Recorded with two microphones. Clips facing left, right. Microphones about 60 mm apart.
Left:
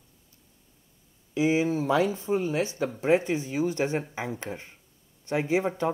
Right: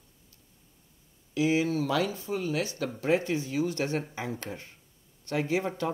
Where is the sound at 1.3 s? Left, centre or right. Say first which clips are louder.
Left 2 dB; left.